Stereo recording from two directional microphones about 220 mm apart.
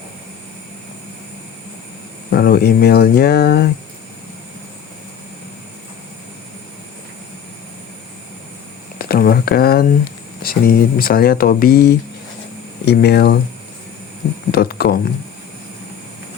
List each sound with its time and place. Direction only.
2.3 s speech: 45° left (ahead or behind)
9.0 s speech: 40° left (ahead or behind)
14.5 s speech: 45° left (ahead or behind)